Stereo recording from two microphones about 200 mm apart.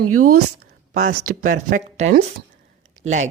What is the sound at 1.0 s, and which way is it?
A woman's voice, 40° right (ahead or behind).